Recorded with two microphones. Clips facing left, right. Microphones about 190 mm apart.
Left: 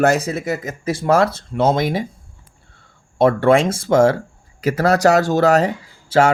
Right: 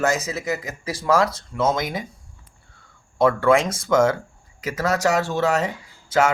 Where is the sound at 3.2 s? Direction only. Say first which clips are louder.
Left 4 dB; 30° left (ahead or behind).